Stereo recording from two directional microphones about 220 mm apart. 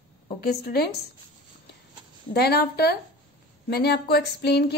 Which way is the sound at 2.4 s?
45° left (ahead or behind).